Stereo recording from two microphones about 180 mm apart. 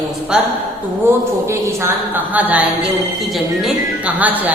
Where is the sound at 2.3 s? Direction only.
10° right (ahead or behind).